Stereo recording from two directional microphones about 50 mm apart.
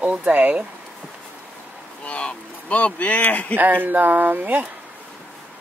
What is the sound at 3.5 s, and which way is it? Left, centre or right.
Speech, right.